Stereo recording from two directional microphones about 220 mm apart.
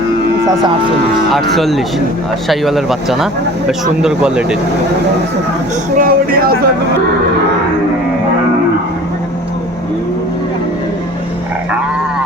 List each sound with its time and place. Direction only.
1.3 s speech: centre (ahead or behind)
6.0 s speech: 40° right (ahead or behind)